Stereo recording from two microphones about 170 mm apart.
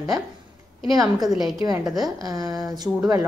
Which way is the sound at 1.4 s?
20° right (ahead or behind).